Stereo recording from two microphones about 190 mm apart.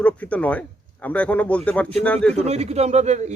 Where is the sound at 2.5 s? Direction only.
35° right (ahead or behind).